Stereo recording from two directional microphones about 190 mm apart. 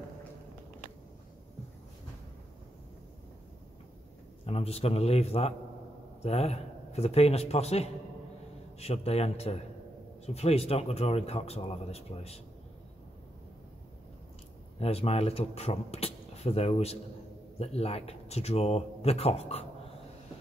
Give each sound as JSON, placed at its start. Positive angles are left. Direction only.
{"t": 4.5, "sound": "speech", "side_deg": 30}
{"t": 14.8, "sound": "speech", "side_deg": 30}